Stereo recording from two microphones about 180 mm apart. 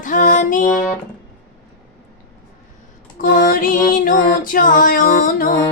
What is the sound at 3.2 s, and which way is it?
Music, 50° left (ahead or behind).